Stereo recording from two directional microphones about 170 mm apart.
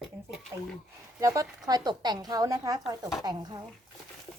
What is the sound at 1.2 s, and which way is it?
A woman's voice, 20° right (ahead or behind).